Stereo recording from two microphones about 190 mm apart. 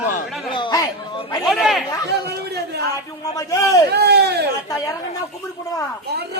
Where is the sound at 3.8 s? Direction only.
60° right (ahead or behind).